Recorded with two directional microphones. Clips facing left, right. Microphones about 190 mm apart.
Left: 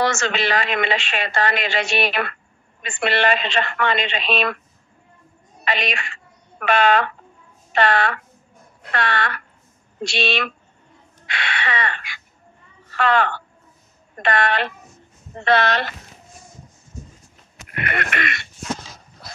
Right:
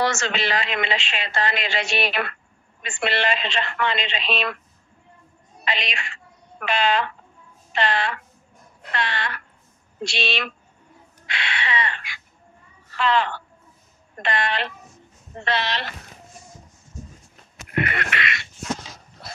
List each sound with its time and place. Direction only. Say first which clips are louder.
0.0 s speech: left 2 dB; 50° left (ahead or behind)
5.7 s speech: left 4 dB; 55° left (ahead or behind)
14.3 s speech: left 4 dB; 55° left (ahead or behind)
17.8 s speech: left 3 dB; 50° left (ahead or behind)